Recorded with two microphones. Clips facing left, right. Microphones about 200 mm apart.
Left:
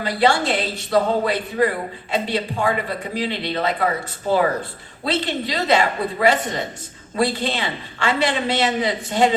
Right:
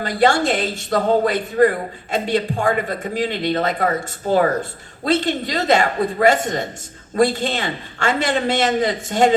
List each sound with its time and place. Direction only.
0.0 s a man's voice: 45° right (ahead or behind)